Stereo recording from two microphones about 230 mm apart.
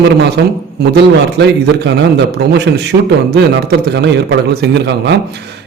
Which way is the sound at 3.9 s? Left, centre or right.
Right.